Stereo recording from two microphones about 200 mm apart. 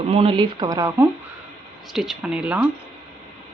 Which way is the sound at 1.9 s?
Centre (ahead or behind).